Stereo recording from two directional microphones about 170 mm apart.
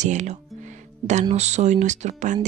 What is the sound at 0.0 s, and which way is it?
Music, 45° right (ahead or behind).